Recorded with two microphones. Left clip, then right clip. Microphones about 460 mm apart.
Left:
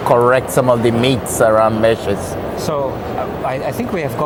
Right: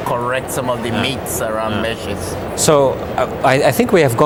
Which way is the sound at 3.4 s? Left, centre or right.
Right.